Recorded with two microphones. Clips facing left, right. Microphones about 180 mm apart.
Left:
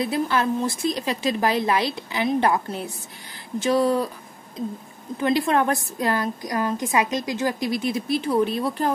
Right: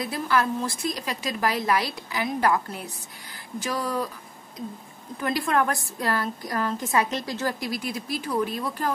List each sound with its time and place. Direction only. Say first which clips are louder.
0.0 s a woman's voice: left 3 dB; 25° left (ahead or behind)
5.1 s a woman's voice: left 4 dB; 25° left (ahead or behind)